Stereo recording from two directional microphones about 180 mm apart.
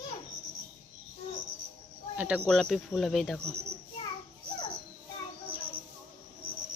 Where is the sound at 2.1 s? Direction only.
10° right (ahead or behind).